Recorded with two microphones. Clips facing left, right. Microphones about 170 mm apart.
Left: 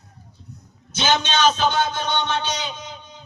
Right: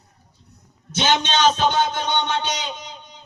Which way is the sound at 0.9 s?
20° right (ahead or behind).